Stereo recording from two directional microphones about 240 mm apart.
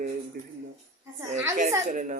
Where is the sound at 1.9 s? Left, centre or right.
Right.